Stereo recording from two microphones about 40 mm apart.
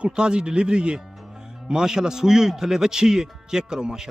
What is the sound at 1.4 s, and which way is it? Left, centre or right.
A man's voice, centre.